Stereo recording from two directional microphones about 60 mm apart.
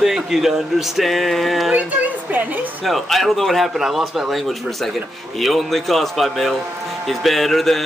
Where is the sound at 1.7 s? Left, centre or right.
Right.